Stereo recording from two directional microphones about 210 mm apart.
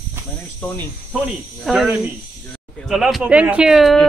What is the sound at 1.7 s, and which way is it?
Speech, 5° right (ahead or behind).